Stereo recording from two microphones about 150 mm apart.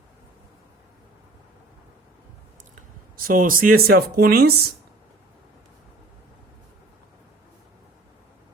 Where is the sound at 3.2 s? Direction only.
65° right (ahead or behind); by 4.5 s 90° right.